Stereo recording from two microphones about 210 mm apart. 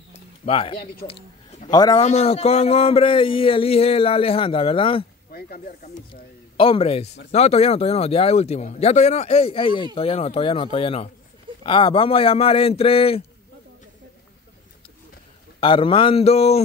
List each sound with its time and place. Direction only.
0.5 s speech: 25° left (ahead or behind)
5.3 s speech: 45° left (ahead or behind)
6.5 s speech: 25° left (ahead or behind)
15.6 s speech: 25° left (ahead or behind)